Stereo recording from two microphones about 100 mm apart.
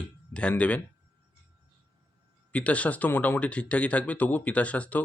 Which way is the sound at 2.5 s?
15° left (ahead or behind).